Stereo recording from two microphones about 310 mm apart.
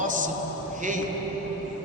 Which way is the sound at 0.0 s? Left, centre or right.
Right.